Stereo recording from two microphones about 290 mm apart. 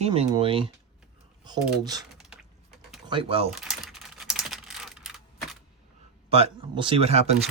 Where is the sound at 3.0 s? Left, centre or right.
Centre.